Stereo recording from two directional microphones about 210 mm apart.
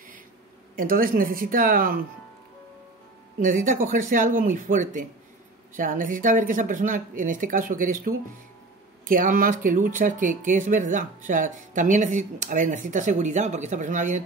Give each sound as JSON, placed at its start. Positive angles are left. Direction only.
{"t": 0.7, "sound": "speech", "side_deg": -40}
{"t": 3.3, "sound": "speech", "side_deg": -40}